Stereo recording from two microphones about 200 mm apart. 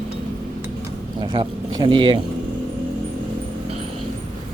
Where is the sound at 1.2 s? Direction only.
20° right (ahead or behind).